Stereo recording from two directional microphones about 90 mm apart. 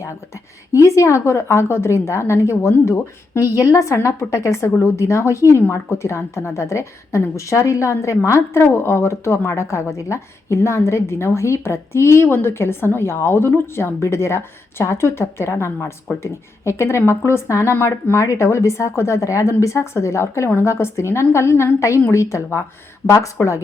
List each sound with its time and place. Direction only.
0.7 s a woman's voice: 35° left (ahead or behind)